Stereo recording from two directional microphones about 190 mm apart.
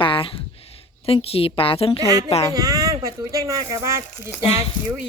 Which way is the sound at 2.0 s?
20° right (ahead or behind).